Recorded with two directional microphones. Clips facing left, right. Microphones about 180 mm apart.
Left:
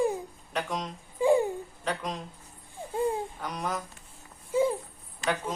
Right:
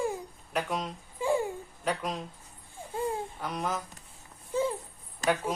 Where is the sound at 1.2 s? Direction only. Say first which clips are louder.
Left 5 dB; 20° left (ahead or behind).